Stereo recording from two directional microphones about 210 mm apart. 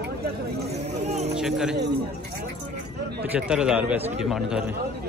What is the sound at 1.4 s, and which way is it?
Speech, centre (ahead or behind).